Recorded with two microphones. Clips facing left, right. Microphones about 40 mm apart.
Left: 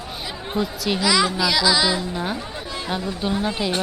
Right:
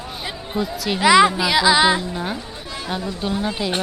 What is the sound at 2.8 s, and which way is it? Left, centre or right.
Speech, centre.